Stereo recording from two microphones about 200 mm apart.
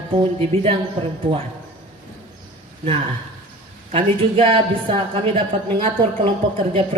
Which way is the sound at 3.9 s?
30° right (ahead or behind).